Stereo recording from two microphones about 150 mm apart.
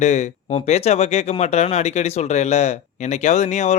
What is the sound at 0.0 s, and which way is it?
Speech, 50° left (ahead or behind).